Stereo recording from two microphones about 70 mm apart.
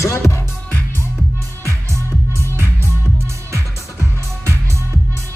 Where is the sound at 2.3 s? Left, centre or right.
Right.